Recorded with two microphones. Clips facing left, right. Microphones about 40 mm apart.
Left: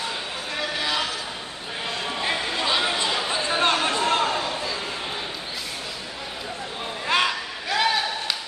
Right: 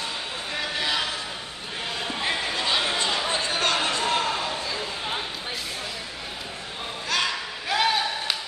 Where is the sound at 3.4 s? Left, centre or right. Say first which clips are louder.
Left 3 dB; left.